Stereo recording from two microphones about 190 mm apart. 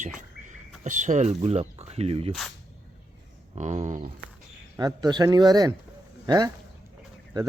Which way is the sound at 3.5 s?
35° right (ahead or behind).